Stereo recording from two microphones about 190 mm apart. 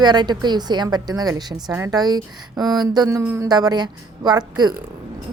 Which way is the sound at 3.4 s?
20° right (ahead or behind).